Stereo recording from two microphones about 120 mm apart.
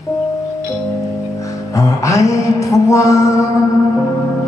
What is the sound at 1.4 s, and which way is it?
Music, 25° left (ahead or behind).